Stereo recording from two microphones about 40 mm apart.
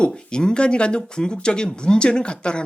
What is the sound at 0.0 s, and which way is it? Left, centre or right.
Speech, left.